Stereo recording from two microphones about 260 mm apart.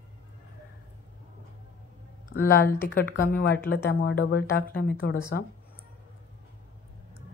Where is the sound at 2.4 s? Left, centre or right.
Left.